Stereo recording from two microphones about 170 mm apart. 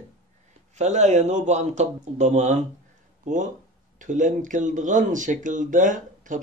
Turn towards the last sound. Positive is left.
turn(degrees=-50)  # may be behind; listen again after turning